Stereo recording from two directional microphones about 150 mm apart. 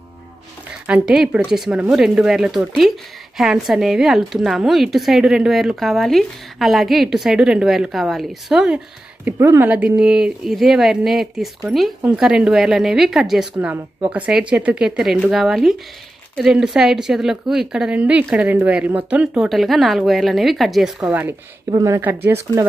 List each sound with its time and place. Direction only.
0.8 s a woman's voice: 5° right (ahead or behind)
21.6 s speech: 20° right (ahead or behind)